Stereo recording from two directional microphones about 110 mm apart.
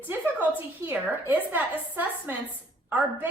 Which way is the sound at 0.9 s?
20° right (ahead or behind).